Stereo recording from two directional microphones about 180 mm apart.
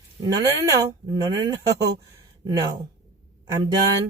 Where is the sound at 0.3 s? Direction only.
20° right (ahead or behind).